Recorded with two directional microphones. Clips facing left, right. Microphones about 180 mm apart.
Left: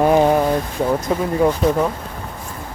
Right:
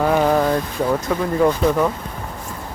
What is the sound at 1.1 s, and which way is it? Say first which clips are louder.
Speech: right 1 dB; 10° left (ahead or behind).